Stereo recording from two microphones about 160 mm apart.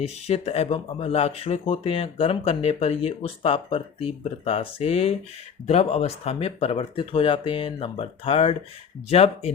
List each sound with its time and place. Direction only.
0.0 s speech: 40° left (ahead or behind)